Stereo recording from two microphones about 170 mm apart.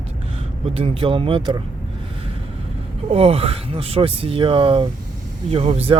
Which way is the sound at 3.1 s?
35° right (ahead or behind).